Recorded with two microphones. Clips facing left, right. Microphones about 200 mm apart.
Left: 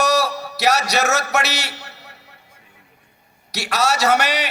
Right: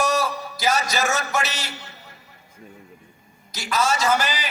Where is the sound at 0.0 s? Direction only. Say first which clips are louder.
Left 3 dB; 75° left (ahead or behind).